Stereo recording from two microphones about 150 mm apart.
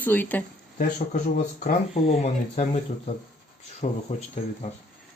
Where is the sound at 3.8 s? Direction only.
45° left (ahead or behind).